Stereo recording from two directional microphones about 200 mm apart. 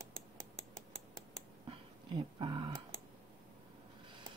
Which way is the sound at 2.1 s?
25° right (ahead or behind).